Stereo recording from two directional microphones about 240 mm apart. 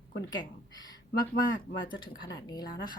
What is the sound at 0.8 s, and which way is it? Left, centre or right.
Speech, centre.